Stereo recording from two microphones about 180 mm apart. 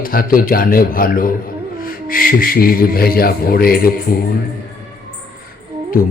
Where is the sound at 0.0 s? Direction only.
55° left (ahead or behind).